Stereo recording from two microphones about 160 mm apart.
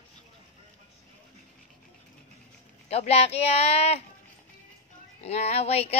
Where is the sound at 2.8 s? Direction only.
40° left (ahead or behind).